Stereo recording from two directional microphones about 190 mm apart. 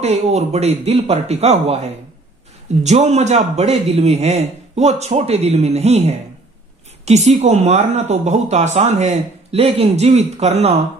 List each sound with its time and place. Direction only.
0.0 s speech: 35° right (ahead or behind)